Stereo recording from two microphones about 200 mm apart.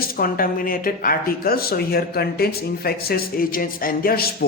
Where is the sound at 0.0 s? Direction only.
45° left (ahead or behind).